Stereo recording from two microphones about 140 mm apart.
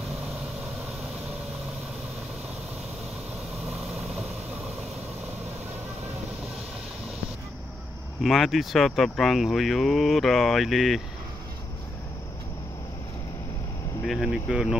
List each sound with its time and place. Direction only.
8.2 s speech: centre (ahead or behind)
14.0 s speech: centre (ahead or behind)